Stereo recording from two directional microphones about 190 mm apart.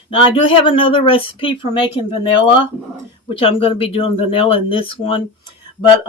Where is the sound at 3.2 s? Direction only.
30° left (ahead or behind).